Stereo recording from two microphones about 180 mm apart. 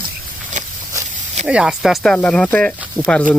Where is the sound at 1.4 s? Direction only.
5° right (ahead or behind).